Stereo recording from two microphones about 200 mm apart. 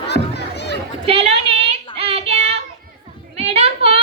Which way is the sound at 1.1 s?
30° right (ahead or behind).